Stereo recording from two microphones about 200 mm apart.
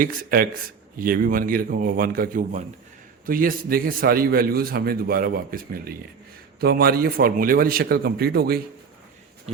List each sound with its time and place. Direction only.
0.0 s a man's voice: 45° right (ahead or behind)